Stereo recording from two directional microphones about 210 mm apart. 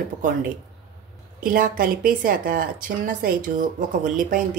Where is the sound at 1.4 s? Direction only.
40° right (ahead or behind).